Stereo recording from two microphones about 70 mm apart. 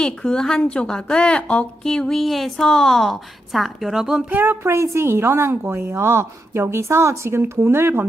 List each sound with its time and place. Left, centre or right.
0.0 s a woman's voice: centre
4.3 s speech: right
4.7 s a woman's voice: right